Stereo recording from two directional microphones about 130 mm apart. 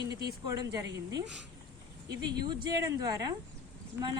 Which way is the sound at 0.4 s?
30° right (ahead or behind).